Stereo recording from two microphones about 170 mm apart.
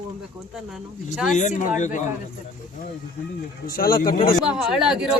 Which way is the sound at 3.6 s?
60° left (ahead or behind).